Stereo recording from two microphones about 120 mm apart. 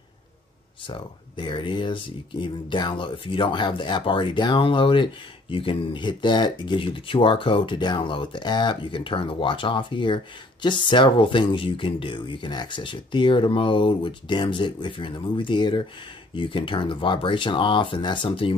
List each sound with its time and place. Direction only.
0.8 s speech: 45° left (ahead or behind)